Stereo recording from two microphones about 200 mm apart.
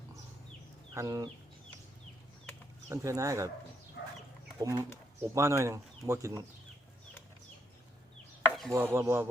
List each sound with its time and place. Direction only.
0.9 s speech: 15° right (ahead or behind)
2.9 s speech: 15° right (ahead or behind)
4.6 s speech: 20° right (ahead or behind)
8.7 s speech: 10° right (ahead or behind)